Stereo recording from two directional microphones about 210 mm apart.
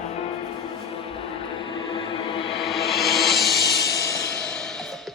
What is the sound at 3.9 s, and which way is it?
Music, 15° left (ahead or behind).